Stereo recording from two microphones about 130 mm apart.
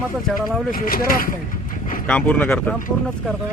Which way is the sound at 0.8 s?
90° left.